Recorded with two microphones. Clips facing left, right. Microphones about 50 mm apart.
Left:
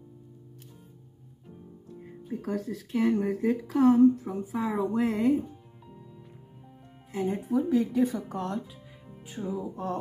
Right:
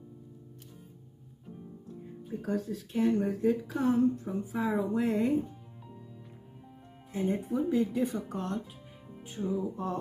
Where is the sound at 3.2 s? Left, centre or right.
Left.